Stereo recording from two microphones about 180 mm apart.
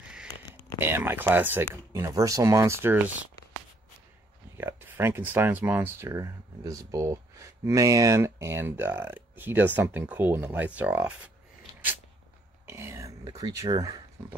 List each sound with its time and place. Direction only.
0.7 s speech: 10° right (ahead or behind)
4.6 s speech: 10° right (ahead or behind)
12.6 s speech: 15° right (ahead or behind)